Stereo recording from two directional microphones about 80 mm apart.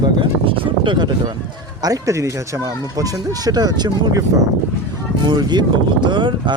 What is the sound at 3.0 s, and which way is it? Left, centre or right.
Speech, right.